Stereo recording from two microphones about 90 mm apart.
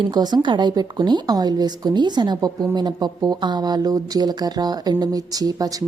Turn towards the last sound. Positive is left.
turn(degrees=-40)  # may be behind; listen again after turning